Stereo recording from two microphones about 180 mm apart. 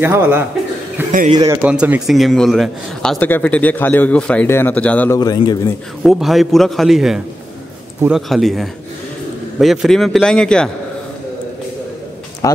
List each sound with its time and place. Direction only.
0.0 s a man's voice: 10° right (ahead or behind)
1.6 s a man's voice: 5° right (ahead or behind); by 5.2 s 10° left (ahead or behind)
5.2 s a man's voice: 20° left (ahead or behind)
6.0 s a man's voice: centre (ahead or behind)
12.4 s a man's voice: 20° left (ahead or behind)